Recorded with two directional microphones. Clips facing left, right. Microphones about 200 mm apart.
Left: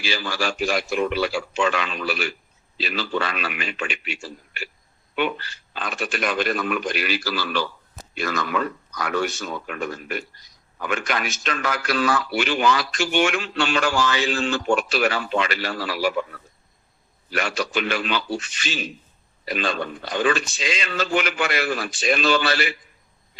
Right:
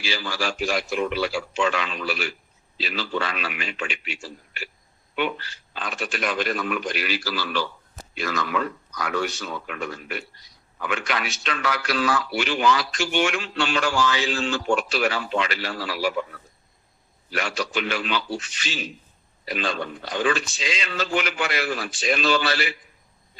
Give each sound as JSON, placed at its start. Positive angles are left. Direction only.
{"t": 0.0, "sound": "a man's voice", "side_deg": 55}
{"t": 17.3, "sound": "a man's voice", "side_deg": 55}